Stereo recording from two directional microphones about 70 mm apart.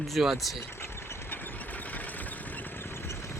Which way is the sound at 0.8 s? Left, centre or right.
Left.